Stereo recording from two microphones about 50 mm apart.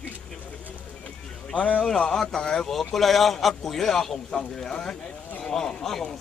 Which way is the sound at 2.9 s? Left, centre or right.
Centre.